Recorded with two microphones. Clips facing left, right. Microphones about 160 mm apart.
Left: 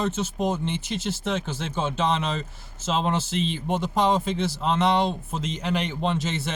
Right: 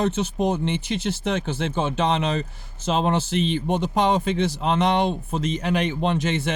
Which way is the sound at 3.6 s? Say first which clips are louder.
Left 1 dB; 20° right (ahead or behind).